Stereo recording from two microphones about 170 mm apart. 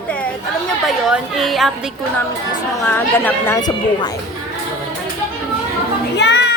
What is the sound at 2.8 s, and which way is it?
Speech, 10° left (ahead or behind).